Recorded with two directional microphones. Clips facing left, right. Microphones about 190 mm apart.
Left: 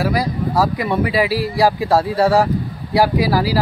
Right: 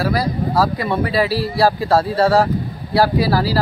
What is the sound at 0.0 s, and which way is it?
Speech, 15° left (ahead or behind).